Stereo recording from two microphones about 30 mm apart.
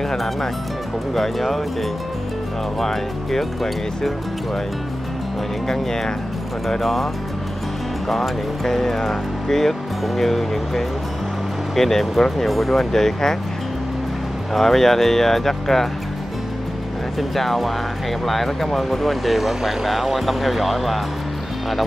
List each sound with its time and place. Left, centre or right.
1.1 s speech: centre
5.7 s speech: centre
8.2 s speech: centre
12.9 s speech: centre
14.5 s speech: centre
17.2 s speech: centre